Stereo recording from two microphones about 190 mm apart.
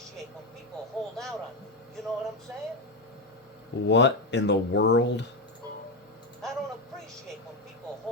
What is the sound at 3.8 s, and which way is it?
Speech, 70° left (ahead or behind).